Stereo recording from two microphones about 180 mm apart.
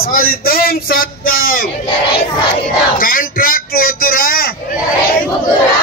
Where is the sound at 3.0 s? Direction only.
50° left (ahead or behind).